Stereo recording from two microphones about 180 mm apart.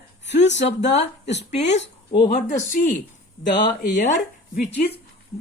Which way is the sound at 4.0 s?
45° left (ahead or behind).